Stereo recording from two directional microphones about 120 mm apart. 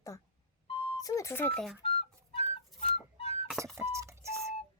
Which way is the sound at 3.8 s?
25° right (ahead or behind).